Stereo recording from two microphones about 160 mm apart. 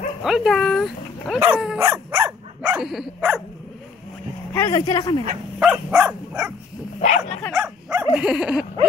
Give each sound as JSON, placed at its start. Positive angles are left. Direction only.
{"t": 0.2, "sound": "speech", "side_deg": 0}
{"t": 1.8, "sound": "dog", "side_deg": -15}
{"t": 4.6, "sound": "speech", "side_deg": 20}
{"t": 5.6, "sound": "dog", "side_deg": -10}
{"t": 7.0, "sound": "speech", "side_deg": 45}
{"t": 7.5, "sound": "dog", "side_deg": -5}
{"t": 8.1, "sound": "speech", "side_deg": -5}